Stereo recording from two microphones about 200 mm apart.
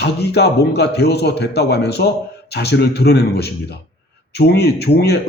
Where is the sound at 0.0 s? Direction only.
55° left (ahead or behind).